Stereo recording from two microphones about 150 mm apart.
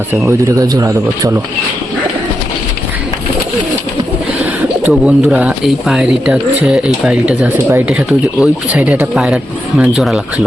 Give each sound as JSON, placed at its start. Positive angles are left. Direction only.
{"t": 0.1, "sound": "speech", "side_deg": -20}
{"t": 4.8, "sound": "speech", "side_deg": -10}